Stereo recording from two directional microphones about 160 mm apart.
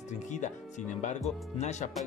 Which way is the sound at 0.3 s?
50° left (ahead or behind).